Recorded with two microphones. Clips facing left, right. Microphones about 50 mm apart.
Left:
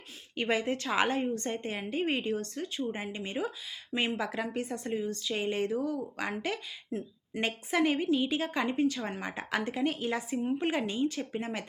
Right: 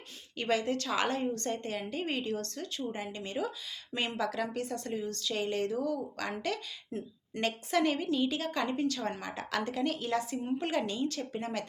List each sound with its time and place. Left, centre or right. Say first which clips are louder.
0.3 s speech: left 1 dB; left
6.9 s speech: left 3 dB; centre
7.4 s a woman's voice: left 1 dB; centre